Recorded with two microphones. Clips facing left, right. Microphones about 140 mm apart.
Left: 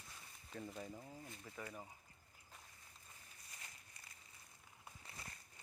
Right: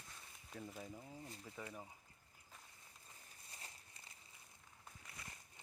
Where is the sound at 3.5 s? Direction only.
30° right (ahead or behind).